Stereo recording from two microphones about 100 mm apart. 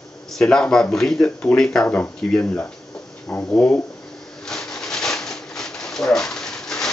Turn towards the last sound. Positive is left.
turn(degrees=5)  # may be behind; listen again after turning